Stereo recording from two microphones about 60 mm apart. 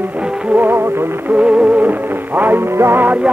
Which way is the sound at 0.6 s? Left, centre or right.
Right.